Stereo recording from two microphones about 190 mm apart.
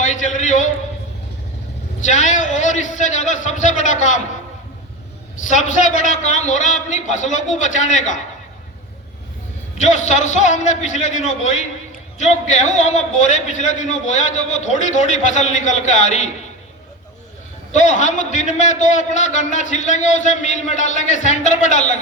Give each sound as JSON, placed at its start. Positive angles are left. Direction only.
{"t": 0.0, "sound": "a sound", "side_deg": 40}
{"t": 2.0, "sound": "a man's voice", "side_deg": 40}
{"t": 5.5, "sound": "a man's voice", "side_deg": 40}
{"t": 9.7, "sound": "a man's voice", "side_deg": 40}
{"t": 17.7, "sound": "a man's voice", "side_deg": 40}